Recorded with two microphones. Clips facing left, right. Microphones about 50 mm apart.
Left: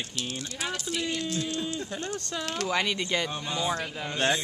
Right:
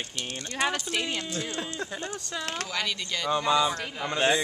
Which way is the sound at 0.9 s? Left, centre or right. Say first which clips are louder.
Even; right.